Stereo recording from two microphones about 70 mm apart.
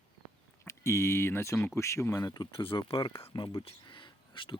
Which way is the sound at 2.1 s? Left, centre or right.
Left.